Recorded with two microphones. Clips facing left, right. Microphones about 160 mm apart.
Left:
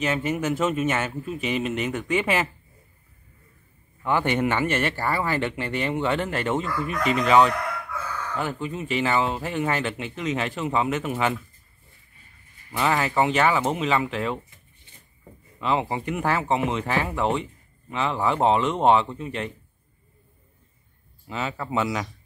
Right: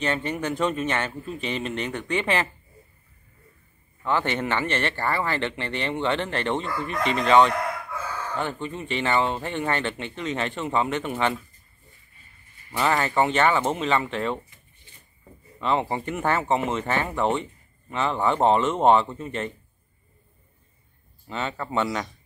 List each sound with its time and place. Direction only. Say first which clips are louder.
0.0 s speech: left 2 dB; 5° left (ahead or behind)
4.0 s speech: left 2 dB; 15° left (ahead or behind)
6.6 s chicken: left 1 dB; 30° right (ahead or behind)
7.1 s speech: even; 5° left (ahead or behind)
12.7 s speech: even; centre (ahead or behind)
15.6 s speech: even; centre (ahead or behind)
21.3 s speech: left 1 dB; 5° left (ahead or behind)